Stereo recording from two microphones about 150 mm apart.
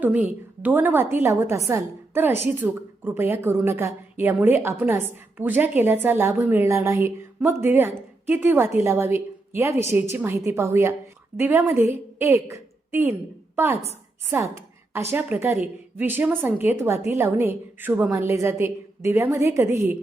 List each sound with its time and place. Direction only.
0.0 s a woman's voice: 10° right (ahead or behind)